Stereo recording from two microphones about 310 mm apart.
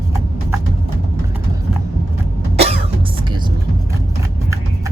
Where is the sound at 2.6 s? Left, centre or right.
Centre.